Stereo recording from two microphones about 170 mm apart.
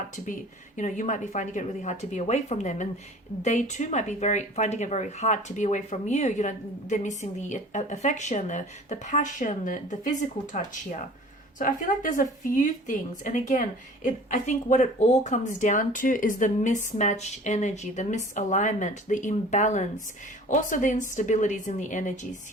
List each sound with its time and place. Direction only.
0.8 s speech: 45° left (ahead or behind)